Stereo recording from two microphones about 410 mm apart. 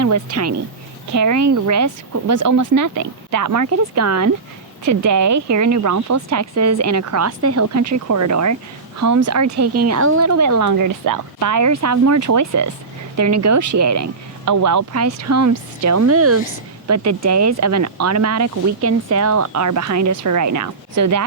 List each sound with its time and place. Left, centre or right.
0.0 s speech: right